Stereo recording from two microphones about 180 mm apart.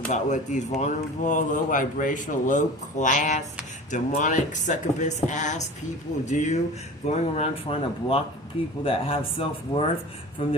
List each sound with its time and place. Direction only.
0.1 s speech: 40° left (ahead or behind)